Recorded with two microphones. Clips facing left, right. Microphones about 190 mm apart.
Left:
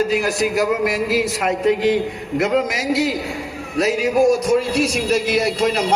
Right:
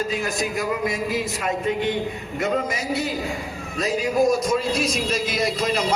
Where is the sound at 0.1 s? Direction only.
80° left.